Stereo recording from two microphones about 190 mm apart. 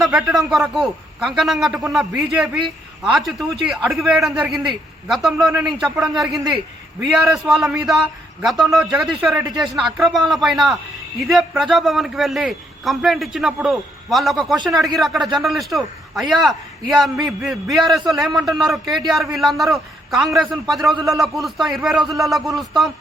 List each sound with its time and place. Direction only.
0.0 s a man's voice: 5° right (ahead or behind)